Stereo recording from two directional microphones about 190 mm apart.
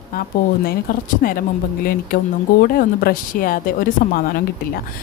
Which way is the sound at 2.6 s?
50° left (ahead or behind).